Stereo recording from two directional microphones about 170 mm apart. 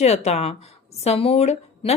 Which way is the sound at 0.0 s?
40° left (ahead or behind).